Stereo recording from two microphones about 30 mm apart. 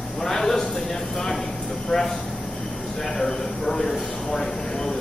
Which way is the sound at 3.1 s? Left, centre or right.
Centre.